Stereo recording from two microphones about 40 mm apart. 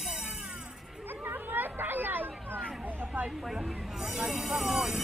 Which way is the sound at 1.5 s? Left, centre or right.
Right.